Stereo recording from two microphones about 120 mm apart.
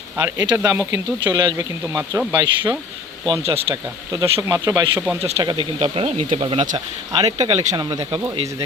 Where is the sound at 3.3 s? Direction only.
55° right (ahead or behind).